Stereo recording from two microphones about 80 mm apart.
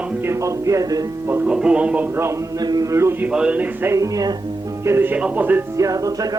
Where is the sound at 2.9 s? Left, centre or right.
Right.